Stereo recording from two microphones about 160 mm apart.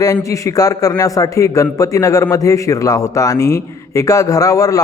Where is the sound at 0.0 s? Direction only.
20° left (ahead or behind).